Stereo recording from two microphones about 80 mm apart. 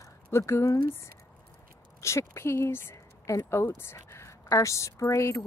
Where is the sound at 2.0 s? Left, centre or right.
Left.